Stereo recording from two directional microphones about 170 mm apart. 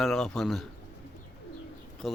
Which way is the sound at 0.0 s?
5° left (ahead or behind).